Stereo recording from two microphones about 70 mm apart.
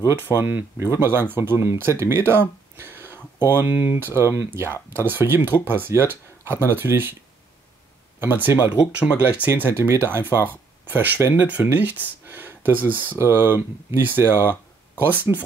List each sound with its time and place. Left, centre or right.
0.0 s speech: right
8.2 s speech: right
9.5 s speech: right